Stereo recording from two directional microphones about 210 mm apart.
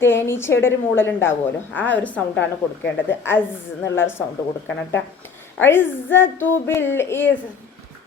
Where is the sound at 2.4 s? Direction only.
60° left (ahead or behind).